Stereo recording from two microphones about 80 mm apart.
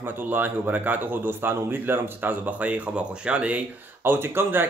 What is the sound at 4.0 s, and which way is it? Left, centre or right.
Speech, right.